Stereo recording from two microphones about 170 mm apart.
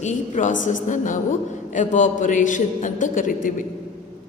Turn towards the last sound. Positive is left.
turn(degrees=50)  # may be behind; listen again after turning